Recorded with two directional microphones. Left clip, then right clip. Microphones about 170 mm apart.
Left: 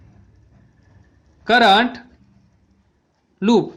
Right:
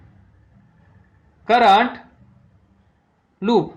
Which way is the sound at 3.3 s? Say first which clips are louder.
Left 1 dB; 45° left (ahead or behind).